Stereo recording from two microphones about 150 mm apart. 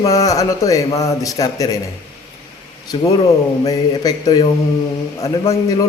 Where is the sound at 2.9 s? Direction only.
30° left (ahead or behind).